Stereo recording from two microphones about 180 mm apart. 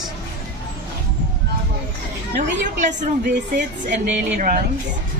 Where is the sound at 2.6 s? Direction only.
45° right (ahead or behind).